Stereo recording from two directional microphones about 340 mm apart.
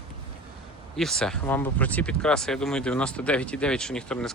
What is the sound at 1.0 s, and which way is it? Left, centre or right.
Speech, centre.